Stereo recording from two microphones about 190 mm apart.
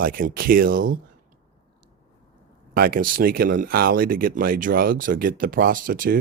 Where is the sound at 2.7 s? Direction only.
50° right (ahead or behind).